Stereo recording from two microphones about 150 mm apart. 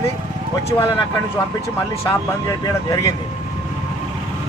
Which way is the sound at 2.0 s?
20° left (ahead or behind).